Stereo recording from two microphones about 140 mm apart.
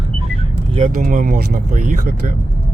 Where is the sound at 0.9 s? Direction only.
70° right (ahead or behind).